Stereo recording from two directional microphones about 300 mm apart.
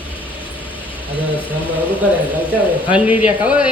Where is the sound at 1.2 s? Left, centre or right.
Centre.